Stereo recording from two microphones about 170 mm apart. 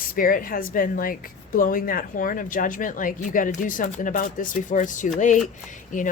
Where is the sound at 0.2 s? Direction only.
55° left (ahead or behind).